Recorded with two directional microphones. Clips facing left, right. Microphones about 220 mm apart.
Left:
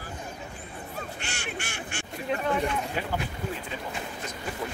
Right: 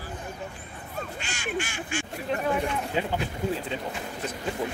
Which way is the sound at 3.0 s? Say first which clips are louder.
Right 4 dB; 20° right (ahead or behind).